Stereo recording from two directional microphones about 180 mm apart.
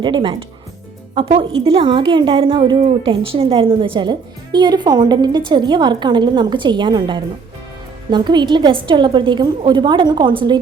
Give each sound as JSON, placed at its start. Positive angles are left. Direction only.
{"t": 0.0, "sound": "a woman's voice", "side_deg": -25}